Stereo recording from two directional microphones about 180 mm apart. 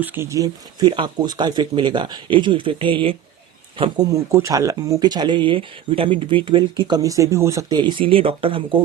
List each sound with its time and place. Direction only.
0.0 s speech: 10° right (ahead or behind); by 8.8 s 30° right (ahead or behind)